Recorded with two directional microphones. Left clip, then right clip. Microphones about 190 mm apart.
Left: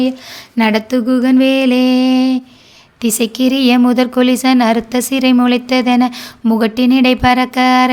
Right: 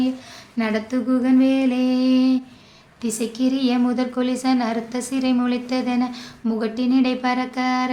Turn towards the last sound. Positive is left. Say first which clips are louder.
# left 11 dB
turn(degrees=50)  # may be behind; listen again after turning